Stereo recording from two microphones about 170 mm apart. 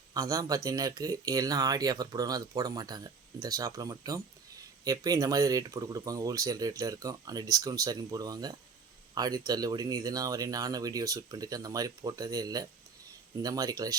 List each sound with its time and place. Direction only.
0.1 s speech: 20° right (ahead or behind)